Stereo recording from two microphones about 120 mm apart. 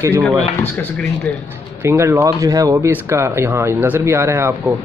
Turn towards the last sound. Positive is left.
turn(degrees=-20)  # may be behind; listen again after turning